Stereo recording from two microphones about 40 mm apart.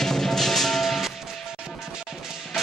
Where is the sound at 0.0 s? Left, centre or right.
Centre.